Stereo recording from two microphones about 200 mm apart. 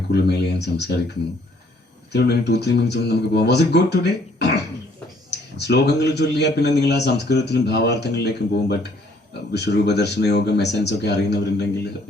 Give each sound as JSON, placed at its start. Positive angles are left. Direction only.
{"t": 0.1, "sound": "a man's voice", "side_deg": 55}
{"t": 2.1, "sound": "a man's voice", "side_deg": 55}